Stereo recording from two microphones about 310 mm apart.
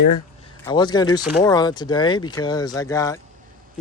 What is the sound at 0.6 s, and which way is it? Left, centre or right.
Speech, centre.